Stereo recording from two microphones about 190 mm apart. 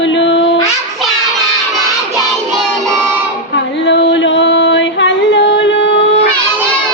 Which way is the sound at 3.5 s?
70° left (ahead or behind).